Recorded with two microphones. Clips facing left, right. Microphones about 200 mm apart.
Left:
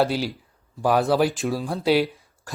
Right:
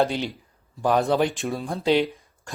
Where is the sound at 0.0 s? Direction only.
5° left (ahead or behind).